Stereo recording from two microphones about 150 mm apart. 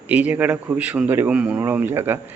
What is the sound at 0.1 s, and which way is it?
A man's voice, 10° right (ahead or behind).